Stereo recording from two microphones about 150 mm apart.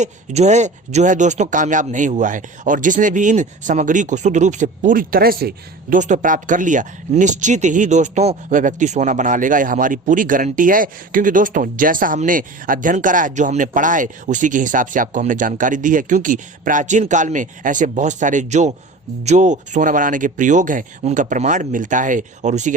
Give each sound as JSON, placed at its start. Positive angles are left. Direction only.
{"t": 0.0, "sound": "speech", "side_deg": -50}
{"t": 6.0, "sound": "speech", "side_deg": -55}